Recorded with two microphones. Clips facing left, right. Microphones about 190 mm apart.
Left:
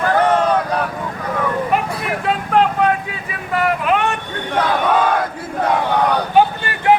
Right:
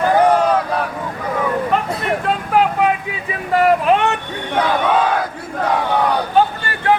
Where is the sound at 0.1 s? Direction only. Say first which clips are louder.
Right 1 dB; 10° right (ahead or behind).